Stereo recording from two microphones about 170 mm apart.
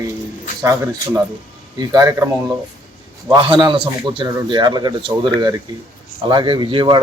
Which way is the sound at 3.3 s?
25° right (ahead or behind).